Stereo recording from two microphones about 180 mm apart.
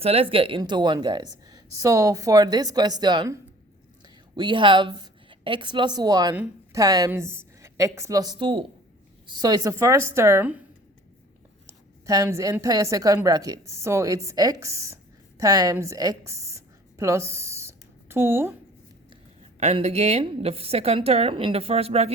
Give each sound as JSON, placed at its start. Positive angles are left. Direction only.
{"t": 0.0, "sound": "a woman's voice", "side_deg": -35}
{"t": 11.6, "sound": "a woman's voice", "side_deg": -20}
{"t": 15.4, "sound": "a sound", "side_deg": -20}
{"t": 19.5, "sound": "a woman's voice", "side_deg": -40}